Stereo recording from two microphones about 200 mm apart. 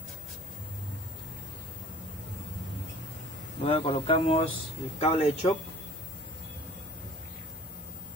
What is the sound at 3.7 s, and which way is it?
Speech, 30° left (ahead or behind).